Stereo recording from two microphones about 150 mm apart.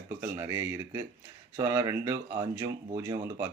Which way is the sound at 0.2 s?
15° right (ahead or behind).